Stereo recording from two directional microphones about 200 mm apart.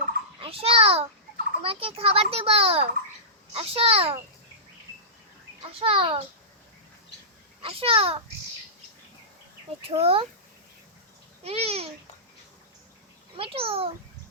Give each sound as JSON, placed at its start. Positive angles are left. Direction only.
{"t": 0.3, "sound": "a child's voice", "side_deg": -30}
{"t": 5.7, "sound": "a child's voice", "side_deg": -30}
{"t": 7.6, "sound": "a child's voice", "side_deg": -30}
{"t": 9.8, "sound": "a child's voice", "side_deg": -30}
{"t": 11.4, "sound": "a child's voice", "side_deg": -30}
{"t": 13.3, "sound": "a child's voice", "side_deg": -30}